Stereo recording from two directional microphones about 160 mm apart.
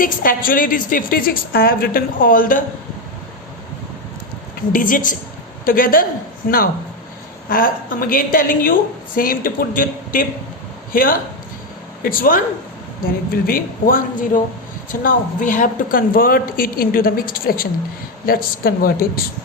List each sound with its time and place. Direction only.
0.0 s a woman's voice: 60° left (ahead or behind)
4.7 s a woman's voice: 55° left (ahead or behind)
7.5 s a woman's voice: 60° left (ahead or behind)